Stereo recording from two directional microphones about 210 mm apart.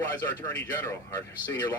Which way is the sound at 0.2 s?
15° left (ahead or behind).